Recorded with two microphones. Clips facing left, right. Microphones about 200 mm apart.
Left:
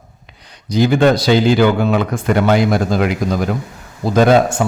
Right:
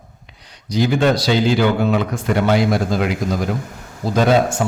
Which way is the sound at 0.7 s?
60° left (ahead or behind).